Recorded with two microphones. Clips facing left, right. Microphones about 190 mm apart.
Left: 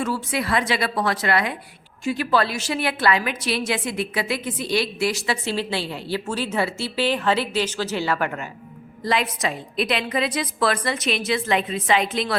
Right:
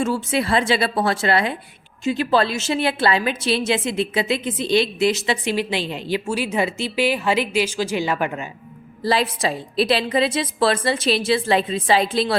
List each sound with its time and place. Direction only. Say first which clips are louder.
0.0 s a woman's voice: right 4 dB; 25° right (ahead or behind)
9.0 s a woman's voice: right 3 dB; 30° right (ahead or behind)